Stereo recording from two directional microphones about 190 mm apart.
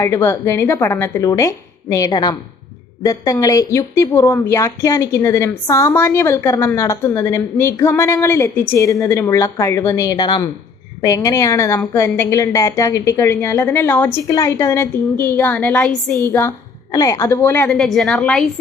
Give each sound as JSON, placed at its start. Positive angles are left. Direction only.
{"t": 0.0, "sound": "a woman's voice", "side_deg": 15}
{"t": 17.7, "sound": "a woman's voice", "side_deg": 0}